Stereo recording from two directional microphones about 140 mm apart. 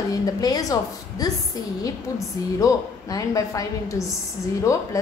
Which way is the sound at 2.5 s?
25° left (ahead or behind).